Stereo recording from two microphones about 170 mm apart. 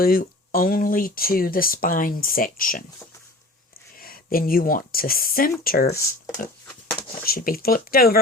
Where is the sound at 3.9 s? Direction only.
60° left (ahead or behind).